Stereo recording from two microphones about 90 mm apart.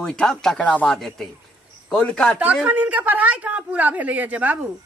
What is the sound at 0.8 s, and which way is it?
Speech, 5° left (ahead or behind).